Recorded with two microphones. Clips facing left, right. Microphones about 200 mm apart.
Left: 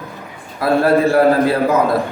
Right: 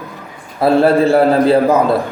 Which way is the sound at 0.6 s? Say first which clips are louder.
Right 4 dB; 30° right (ahead or behind).